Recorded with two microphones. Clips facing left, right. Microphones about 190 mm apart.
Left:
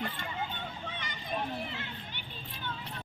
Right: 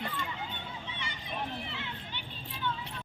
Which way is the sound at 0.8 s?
45° left (ahead or behind).